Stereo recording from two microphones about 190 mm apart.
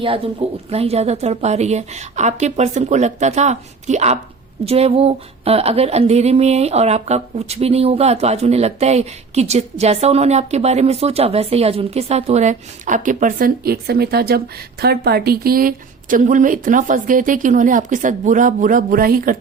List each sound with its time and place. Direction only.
0.0 s speech: 30° right (ahead or behind); by 19.4 s 50° right (ahead or behind)